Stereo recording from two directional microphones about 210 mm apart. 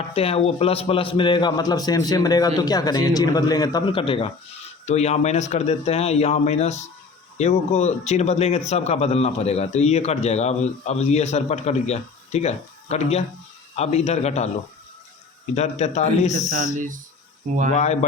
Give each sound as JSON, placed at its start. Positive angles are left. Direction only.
{"t": 0.1, "sound": "a man's voice", "side_deg": 30}
{"t": 15.5, "sound": "a man's voice", "side_deg": 30}
{"t": 16.7, "sound": "speech", "side_deg": -40}
{"t": 17.7, "sound": "a man's voice", "side_deg": 35}